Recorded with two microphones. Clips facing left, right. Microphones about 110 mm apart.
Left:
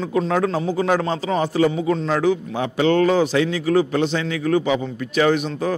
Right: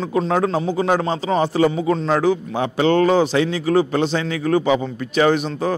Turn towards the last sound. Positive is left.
turn(degrees=-30)  # may be behind; listen again after turning